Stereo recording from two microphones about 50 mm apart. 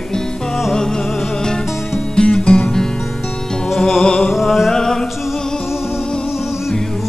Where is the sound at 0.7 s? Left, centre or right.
Centre.